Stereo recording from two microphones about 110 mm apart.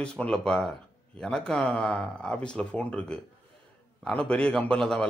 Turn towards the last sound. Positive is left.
turn(degrees=5)  # may be behind; listen again after turning